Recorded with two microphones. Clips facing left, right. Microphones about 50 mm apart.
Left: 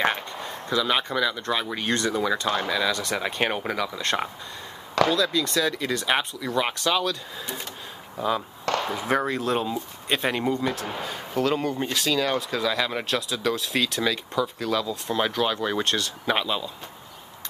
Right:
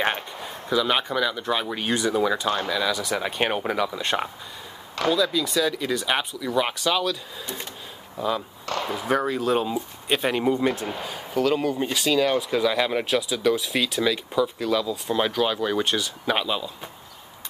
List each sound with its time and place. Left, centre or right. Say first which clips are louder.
0.5 s speech: right 2 dB; centre
10.6 s a man's voice: right 3 dB; right
11.1 s speech: right 2 dB; centre